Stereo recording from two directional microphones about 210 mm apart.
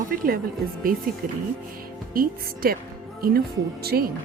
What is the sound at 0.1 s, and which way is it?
Speech, 40° right (ahead or behind).